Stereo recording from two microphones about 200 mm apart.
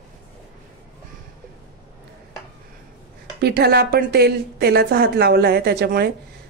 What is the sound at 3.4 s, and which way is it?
A woman's voice, 55° right (ahead or behind).